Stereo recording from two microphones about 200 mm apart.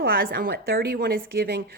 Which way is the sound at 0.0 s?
50° right (ahead or behind).